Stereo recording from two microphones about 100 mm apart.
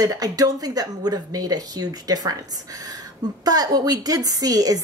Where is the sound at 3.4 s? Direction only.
40° right (ahead or behind).